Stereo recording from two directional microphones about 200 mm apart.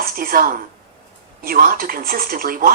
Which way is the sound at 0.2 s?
45° right (ahead or behind).